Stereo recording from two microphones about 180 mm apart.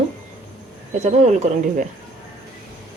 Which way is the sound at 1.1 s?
40° right (ahead or behind).